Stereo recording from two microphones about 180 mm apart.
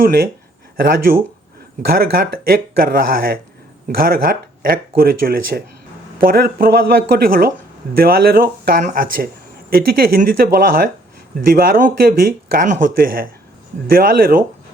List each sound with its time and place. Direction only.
0.0 s speech: 55° right (ahead or behind)